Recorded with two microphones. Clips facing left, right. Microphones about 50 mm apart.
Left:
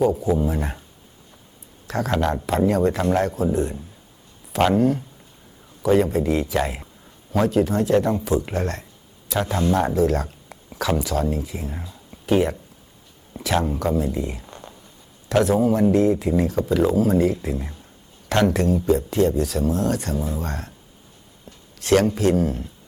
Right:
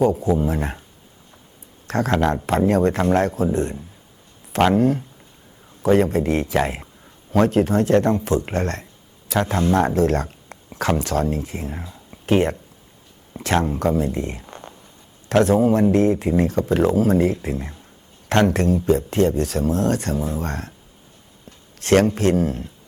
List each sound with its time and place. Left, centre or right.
0.0 s speech: right
1.9 s speech: right
3.5 s speech: right
4.7 s speech: right
5.8 s speech: right
6.6 s speech: right
8.4 s speech: right
11.7 s speech: right
12.2 s speech: right
14.0 s speech: right
15.3 s speech: right
21.8 s speech: right